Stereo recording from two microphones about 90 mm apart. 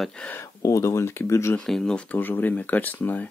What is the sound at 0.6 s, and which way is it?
Speech, 35° left (ahead or behind).